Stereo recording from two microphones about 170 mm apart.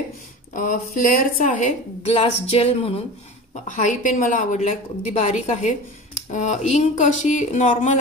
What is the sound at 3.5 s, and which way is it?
Speech, 50° left (ahead or behind).